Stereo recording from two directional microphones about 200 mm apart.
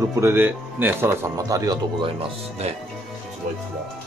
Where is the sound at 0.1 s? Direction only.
10° right (ahead or behind).